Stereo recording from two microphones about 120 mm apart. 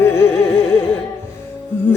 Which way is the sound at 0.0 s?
20° left (ahead or behind).